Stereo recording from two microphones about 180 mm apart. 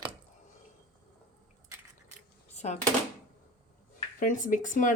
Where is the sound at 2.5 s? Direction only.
40° left (ahead or behind).